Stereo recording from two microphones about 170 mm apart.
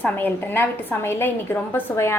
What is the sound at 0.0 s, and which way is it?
A woman's voice, 10° left (ahead or behind).